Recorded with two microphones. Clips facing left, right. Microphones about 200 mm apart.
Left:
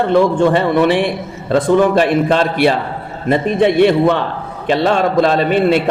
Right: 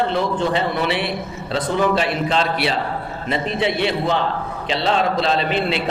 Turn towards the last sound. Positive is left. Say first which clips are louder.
# left 7 dB
turn(degrees=45)  # may be behind; listen again after turning